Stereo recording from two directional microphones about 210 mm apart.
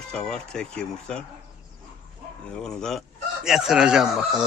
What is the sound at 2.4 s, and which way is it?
Speech, 5° left (ahead or behind).